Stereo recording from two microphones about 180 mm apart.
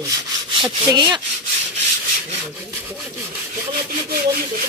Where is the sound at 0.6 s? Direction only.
25° right (ahead or behind).